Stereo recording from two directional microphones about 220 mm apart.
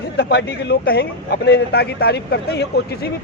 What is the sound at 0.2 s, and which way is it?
Speech, 50° left (ahead or behind).